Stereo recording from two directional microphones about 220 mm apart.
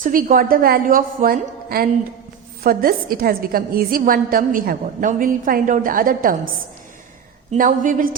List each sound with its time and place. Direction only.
0.0 s a woman's voice: 40° right (ahead or behind)
7.5 s a woman's voice: 35° right (ahead or behind)